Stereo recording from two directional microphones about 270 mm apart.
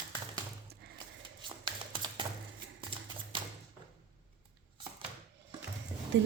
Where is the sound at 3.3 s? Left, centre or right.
Centre.